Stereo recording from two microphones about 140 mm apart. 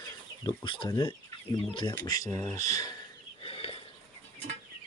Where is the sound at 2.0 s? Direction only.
25° left (ahead or behind).